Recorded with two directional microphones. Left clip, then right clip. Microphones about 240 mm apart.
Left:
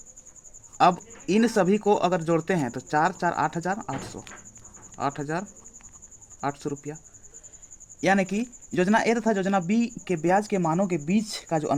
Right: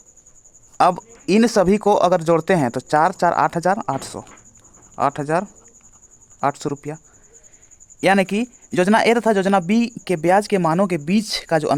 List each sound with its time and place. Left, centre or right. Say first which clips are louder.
0.8 s speech: right 4 dB; right
8.0 s speech: right 7 dB; right